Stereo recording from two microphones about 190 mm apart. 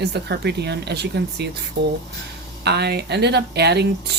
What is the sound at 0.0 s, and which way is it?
Speech, 60° right (ahead or behind).